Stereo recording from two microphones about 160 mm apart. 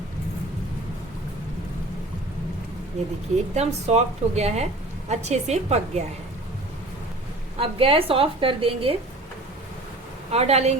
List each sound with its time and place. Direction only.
3.5 s a woman's voice: 45° right (ahead or behind)
7.6 s a woman's voice: 35° right (ahead or behind)
10.3 s a woman's voice: 40° right (ahead or behind)